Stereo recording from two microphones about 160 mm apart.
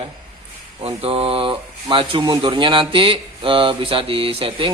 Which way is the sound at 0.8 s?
35° right (ahead or behind).